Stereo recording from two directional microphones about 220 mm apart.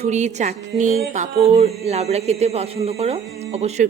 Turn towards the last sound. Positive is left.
turn(degrees=-30)  # may be behind; listen again after turning